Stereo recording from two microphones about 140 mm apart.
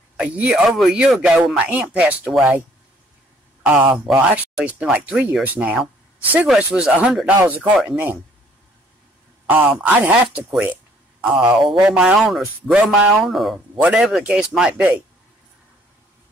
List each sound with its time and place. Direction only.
0.2 s speech: 10° right (ahead or behind)
3.9 s speech: 5° right (ahead or behind)
9.5 s speech: 15° right (ahead or behind)